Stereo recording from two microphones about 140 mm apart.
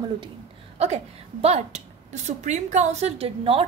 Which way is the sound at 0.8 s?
50° right (ahead or behind).